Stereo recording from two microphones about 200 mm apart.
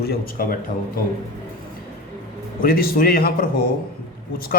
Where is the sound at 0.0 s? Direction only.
50° left (ahead or behind).